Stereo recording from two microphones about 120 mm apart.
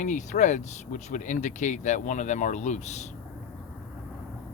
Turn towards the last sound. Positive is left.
turn(degrees=75)  # may be behind; listen again after turning